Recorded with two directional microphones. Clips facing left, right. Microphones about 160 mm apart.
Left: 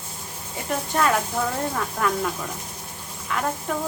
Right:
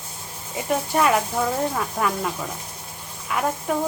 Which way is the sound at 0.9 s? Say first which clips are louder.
Right 1 dB; 10° right (ahead or behind).